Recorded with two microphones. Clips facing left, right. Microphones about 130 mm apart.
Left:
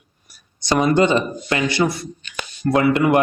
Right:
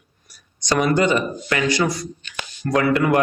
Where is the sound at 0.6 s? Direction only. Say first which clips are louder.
Left 2 dB; 20° left (ahead or behind).